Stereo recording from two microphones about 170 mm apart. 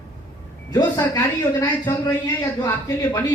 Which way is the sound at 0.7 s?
20° left (ahead or behind).